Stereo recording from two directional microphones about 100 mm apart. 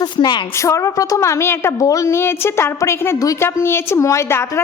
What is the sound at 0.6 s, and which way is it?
A woman's voice, 30° left (ahead or behind).